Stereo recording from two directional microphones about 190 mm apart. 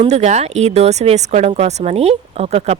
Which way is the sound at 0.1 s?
35° right (ahead or behind).